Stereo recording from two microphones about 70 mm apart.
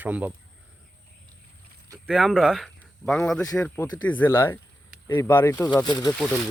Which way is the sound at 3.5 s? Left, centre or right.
Centre.